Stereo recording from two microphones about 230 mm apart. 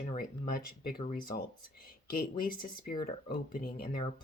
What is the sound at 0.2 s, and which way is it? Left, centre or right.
Speech, left.